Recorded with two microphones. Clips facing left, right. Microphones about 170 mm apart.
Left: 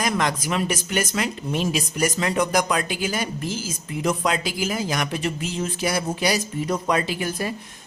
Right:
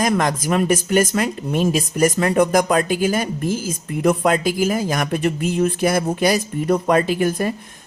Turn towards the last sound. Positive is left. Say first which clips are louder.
# right 7 dB
turn(degrees=-50)  # may be behind; listen again after turning